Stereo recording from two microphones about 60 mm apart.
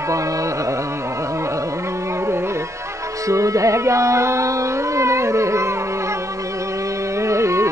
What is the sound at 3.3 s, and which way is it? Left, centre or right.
Music, right.